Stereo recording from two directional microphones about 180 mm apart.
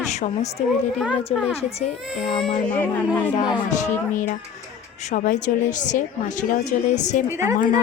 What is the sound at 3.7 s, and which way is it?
A woman's voice, 45° left (ahead or behind).